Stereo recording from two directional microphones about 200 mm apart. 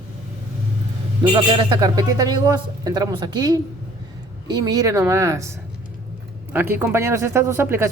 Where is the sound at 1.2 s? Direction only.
25° right (ahead or behind).